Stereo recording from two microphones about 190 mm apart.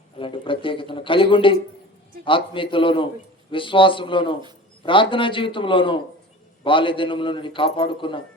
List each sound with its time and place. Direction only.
0.2 s a man's voice: 25° left (ahead or behind)